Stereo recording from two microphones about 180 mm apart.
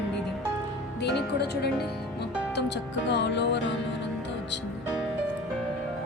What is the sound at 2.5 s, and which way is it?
Speech, 75° left (ahead or behind).